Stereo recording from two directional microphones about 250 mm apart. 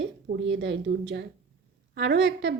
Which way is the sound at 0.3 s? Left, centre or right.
Right.